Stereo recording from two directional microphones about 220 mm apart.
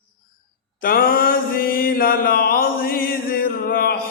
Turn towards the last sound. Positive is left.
turn(degrees=45)  # may be behind; listen again after turning